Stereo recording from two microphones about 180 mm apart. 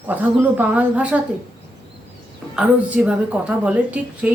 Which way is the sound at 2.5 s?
5° right (ahead or behind).